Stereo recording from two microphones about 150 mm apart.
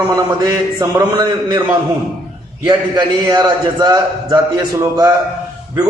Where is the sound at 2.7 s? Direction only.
30° right (ahead or behind).